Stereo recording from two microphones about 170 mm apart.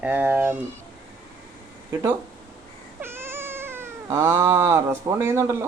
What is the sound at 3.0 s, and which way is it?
Cat, 15° right (ahead or behind).